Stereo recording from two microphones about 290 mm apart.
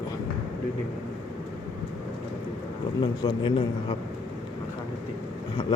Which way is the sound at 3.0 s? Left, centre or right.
Centre.